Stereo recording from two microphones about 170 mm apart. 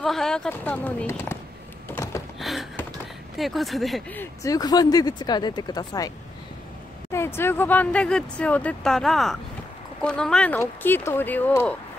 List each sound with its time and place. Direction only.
0.0 s speech: centre (ahead or behind)
2.3 s a sound: centre (ahead or behind)
3.3 s speech: centre (ahead or behind)
4.2 s speech: 20° left (ahead or behind)